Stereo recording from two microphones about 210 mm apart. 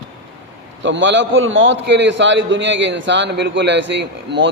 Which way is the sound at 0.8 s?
60° right (ahead or behind).